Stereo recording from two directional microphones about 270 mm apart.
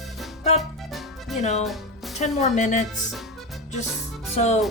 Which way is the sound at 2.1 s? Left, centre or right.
Left.